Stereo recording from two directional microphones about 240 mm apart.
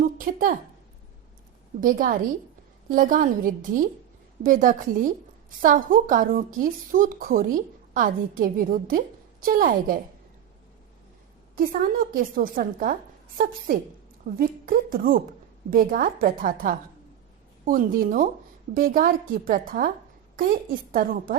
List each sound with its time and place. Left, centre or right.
0.0 s a sound: right
1.8 s a woman's voice: right
11.5 s a woman's voice: right